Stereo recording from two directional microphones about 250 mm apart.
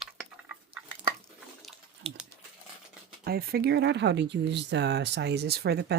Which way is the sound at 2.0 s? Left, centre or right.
Right.